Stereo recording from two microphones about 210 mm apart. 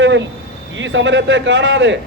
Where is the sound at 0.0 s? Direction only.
60° right (ahead or behind).